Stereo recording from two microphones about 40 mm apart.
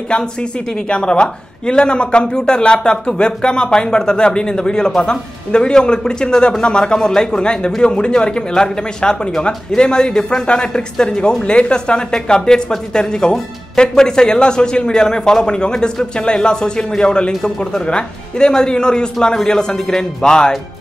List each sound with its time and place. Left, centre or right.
0.1 s speech: left